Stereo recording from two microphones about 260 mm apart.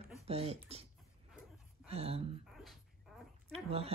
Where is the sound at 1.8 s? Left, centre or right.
Right.